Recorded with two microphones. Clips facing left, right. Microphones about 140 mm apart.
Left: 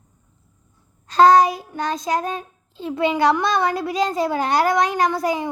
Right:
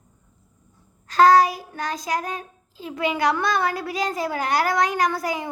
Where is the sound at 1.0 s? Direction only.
20° left (ahead or behind).